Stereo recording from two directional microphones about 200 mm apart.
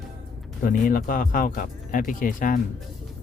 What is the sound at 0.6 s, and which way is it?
Speech, 45° left (ahead or behind).